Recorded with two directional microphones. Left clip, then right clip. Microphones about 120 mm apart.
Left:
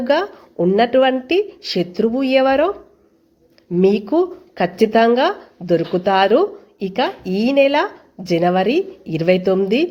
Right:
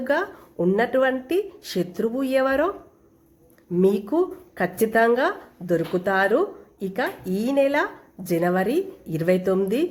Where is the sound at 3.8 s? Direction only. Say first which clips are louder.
Left 5 dB; 15° left (ahead or behind).